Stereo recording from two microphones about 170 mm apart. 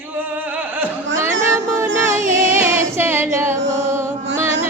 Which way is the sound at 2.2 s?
50° right (ahead or behind).